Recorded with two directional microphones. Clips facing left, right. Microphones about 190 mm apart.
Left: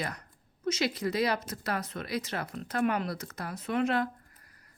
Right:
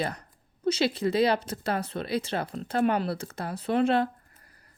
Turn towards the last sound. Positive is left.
turn(degrees=-30)  # may be behind; listen again after turning